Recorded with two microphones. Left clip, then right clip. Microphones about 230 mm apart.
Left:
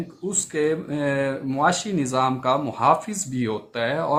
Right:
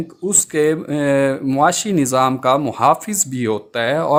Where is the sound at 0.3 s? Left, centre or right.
Right.